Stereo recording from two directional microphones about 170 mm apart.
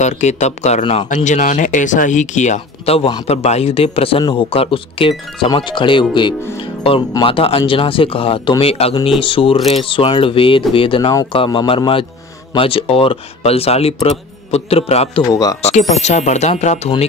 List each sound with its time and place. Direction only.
0.0 s speech: 40° left (ahead or behind)